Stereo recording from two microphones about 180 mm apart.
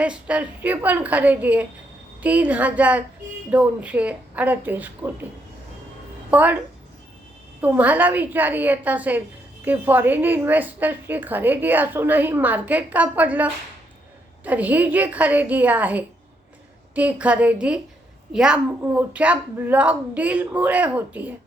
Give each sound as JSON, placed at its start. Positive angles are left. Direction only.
{"t": 0.0, "sound": "a woman's voice", "side_deg": -5}
{"t": 6.3, "sound": "a woman's voice", "side_deg": -10}
{"t": 7.6, "sound": "a woman's voice", "side_deg": -10}